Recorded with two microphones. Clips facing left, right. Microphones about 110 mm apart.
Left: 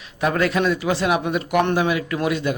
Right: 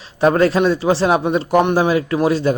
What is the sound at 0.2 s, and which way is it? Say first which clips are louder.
Speech: right 6 dB; 35° right (ahead or behind).